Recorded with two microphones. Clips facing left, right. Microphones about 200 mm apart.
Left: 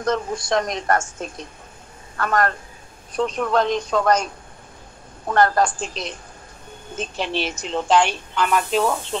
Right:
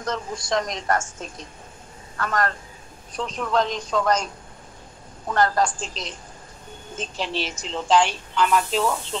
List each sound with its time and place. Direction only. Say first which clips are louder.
0.0 s speech: left 6 dB; 60° left (ahead or behind)
5.3 s speech: left 3 dB; 60° left (ahead or behind)